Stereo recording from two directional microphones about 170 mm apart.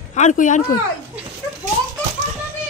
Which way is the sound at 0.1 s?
45° left (ahead or behind).